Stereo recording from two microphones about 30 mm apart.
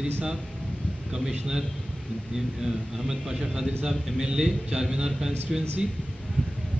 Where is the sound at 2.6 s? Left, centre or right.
Centre.